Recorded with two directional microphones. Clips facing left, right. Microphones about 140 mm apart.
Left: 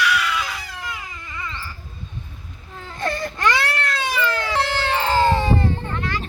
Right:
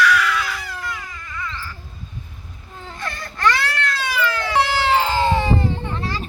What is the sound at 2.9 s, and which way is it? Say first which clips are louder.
Baby cry: left 7 dB; 30° left (ahead or behind).